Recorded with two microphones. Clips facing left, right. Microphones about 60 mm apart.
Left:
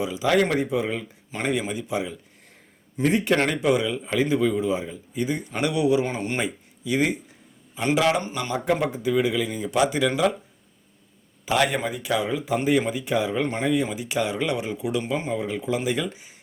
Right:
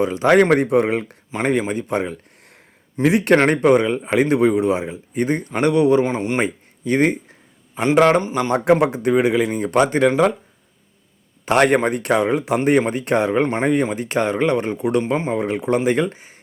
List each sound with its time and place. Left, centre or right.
0.0 s speech: right
1.5 s speech: right
3.0 s a man's voice: right
3.3 s speech: right
4.0 s speech: right
6.1 s speech: right
6.4 s speech: right
8.2 s speech: right
8.5 s speech: right
11.4 s speech: right
13.4 s speech: right
15.1 s speech: right
15.4 s speech: right
15.8 s speech: right